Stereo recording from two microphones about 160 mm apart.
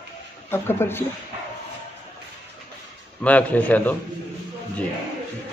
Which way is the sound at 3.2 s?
10° left (ahead or behind).